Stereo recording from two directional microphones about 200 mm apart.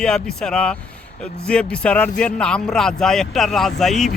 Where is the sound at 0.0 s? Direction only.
5° left (ahead or behind).